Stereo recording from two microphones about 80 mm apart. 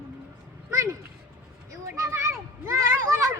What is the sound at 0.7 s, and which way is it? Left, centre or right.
Speech, right.